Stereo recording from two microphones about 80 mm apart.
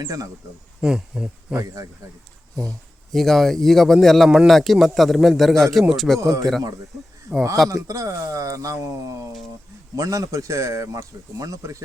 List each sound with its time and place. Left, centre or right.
0.0 s speech: right
0.8 s speech: centre
1.5 s speech: right
3.1 s speech: centre
6.1 s speech: right
7.3 s speech: centre
7.7 s speech: right